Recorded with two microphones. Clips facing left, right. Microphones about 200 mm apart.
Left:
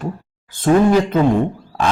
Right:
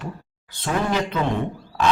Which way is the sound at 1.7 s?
50° left (ahead or behind).